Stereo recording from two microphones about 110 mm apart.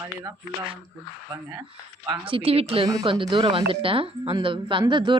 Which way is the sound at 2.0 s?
55° right (ahead or behind).